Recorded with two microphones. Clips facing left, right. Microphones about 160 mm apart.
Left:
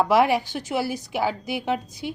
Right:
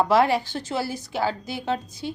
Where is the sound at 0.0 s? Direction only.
15° left (ahead or behind).